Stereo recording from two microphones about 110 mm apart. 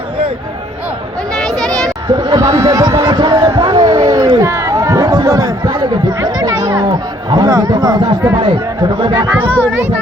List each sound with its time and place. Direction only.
1.4 s a sound: 5° left (ahead or behind)
2.0 s speech: 40° right (ahead or behind)
3.6 s a sound: 35° right (ahead or behind)
4.4 s chatter: 25° right (ahead or behind)
7.3 s speech: 35° right (ahead or behind)
8.4 s speech: 45° right (ahead or behind)